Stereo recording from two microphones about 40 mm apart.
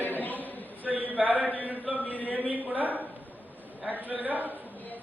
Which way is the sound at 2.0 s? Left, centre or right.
Left.